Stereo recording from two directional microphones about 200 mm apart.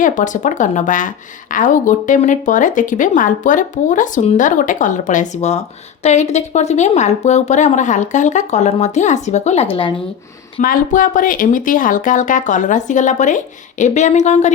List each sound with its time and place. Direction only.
0.0 s a woman's voice: 40° left (ahead or behind)
10.6 s a woman's voice: 45° left (ahead or behind)